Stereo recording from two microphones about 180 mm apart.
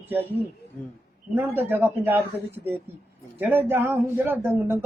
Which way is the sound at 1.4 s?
10° right (ahead or behind).